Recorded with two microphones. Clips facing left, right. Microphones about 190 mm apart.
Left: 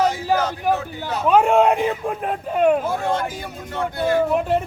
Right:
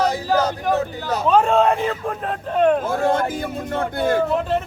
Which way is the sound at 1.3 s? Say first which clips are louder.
Left 1 dB; 15° left (ahead or behind).